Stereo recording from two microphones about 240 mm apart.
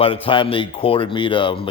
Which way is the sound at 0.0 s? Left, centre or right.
Left.